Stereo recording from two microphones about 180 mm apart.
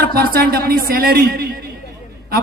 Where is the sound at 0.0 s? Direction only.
60° right (ahead or behind).